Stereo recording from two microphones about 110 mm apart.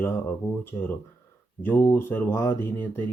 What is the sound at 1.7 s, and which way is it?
Speech, 20° left (ahead or behind).